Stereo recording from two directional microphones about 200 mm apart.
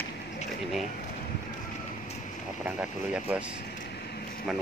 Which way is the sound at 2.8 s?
5° right (ahead or behind).